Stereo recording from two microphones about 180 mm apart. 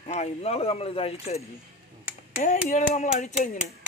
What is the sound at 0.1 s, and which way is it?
Speech, 35° left (ahead or behind).